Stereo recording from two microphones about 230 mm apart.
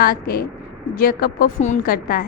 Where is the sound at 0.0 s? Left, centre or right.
Left.